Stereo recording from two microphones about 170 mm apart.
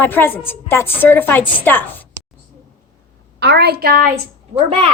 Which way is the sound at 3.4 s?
75° right (ahead or behind).